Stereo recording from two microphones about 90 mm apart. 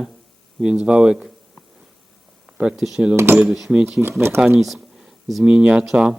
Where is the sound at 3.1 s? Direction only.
25° right (ahead or behind).